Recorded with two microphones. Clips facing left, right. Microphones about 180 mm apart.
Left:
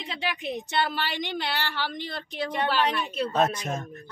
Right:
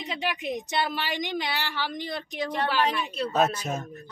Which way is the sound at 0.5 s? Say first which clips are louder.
Left 2 dB; 10° right (ahead or behind).